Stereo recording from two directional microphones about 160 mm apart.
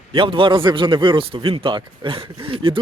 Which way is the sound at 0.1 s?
35° right (ahead or behind).